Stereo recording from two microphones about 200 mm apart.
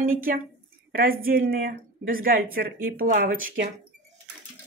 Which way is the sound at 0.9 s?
45° right (ahead or behind).